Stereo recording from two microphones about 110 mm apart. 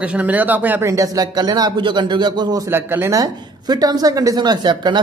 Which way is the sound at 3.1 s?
35° right (ahead or behind).